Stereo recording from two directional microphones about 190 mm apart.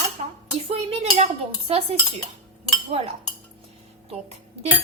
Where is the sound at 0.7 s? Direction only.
35° right (ahead or behind).